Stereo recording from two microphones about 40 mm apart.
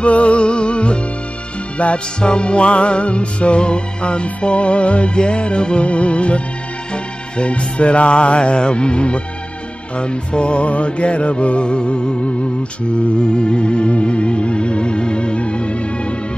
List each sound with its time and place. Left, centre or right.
0.0 s music: left